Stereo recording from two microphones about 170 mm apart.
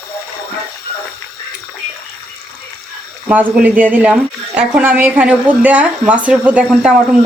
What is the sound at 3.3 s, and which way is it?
Speech, 10° right (ahead or behind).